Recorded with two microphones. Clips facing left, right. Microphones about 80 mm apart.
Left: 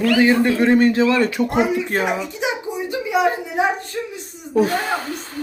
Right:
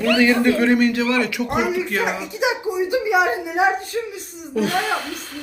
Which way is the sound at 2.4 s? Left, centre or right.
Centre.